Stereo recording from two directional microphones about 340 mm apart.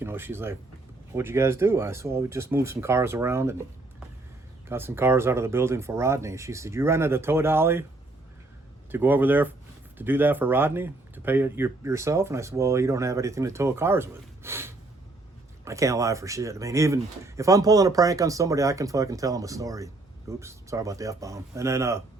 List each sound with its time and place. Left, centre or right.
0.0 s speech: centre
4.7 s speech: centre
8.9 s speech: centre